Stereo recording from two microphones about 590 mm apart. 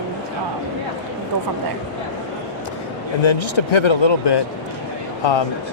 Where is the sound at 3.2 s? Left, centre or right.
Left.